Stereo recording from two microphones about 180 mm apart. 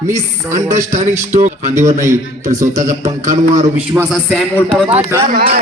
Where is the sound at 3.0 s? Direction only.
20° right (ahead or behind).